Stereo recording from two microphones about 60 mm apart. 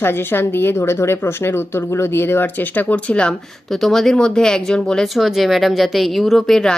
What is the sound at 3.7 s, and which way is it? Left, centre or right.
Speech, centre.